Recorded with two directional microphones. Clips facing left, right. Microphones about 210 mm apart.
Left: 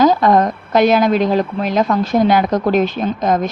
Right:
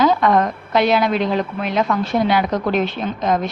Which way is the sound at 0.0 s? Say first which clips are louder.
Left 3 dB; 35° left (ahead or behind).